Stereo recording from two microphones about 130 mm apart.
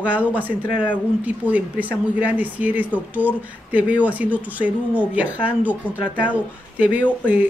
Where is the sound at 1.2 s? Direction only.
10° right (ahead or behind).